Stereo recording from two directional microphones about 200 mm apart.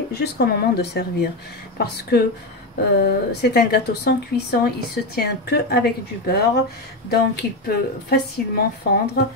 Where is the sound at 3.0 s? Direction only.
55° left (ahead or behind).